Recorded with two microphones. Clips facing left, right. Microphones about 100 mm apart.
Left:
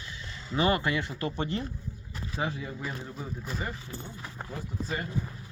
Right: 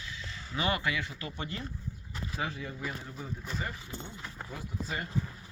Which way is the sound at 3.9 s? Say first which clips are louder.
Left 1 dB; 20° right (ahead or behind).